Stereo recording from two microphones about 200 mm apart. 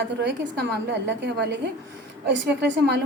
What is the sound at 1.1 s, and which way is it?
A woman's voice, 60° right (ahead or behind).